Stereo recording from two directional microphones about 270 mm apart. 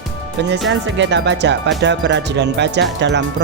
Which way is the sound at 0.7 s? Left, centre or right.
Right.